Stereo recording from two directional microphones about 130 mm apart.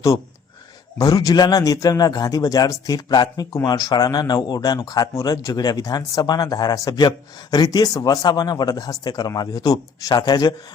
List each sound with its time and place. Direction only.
0.9 s a man's voice: 30° left (ahead or behind)